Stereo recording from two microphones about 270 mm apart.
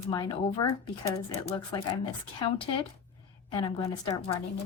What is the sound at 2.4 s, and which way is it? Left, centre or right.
A woman's voice, centre.